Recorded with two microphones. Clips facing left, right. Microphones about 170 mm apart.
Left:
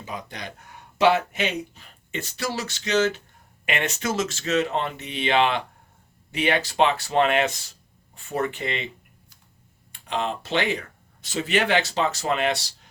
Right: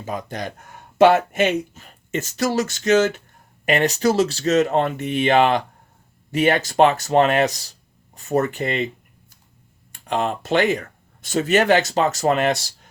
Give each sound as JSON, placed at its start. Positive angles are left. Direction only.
{"t": 0.0, "sound": "speech", "side_deg": -45}
{"t": 3.7, "sound": "speech", "side_deg": -35}
{"t": 9.9, "sound": "speech", "side_deg": -45}